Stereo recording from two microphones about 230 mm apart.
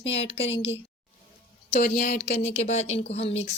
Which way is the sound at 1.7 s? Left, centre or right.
Left.